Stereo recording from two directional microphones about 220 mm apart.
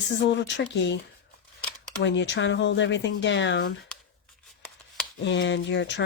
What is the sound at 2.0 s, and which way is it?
Speech, 55° left (ahead or behind).